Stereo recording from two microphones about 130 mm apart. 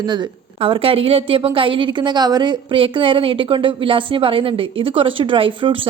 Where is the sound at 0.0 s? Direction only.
35° right (ahead or behind).